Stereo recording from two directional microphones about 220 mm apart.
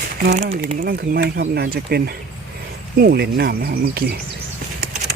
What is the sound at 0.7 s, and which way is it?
Speech, 40° right (ahead or behind).